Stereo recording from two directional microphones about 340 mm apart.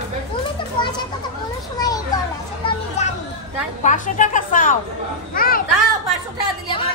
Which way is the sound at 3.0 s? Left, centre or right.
Centre.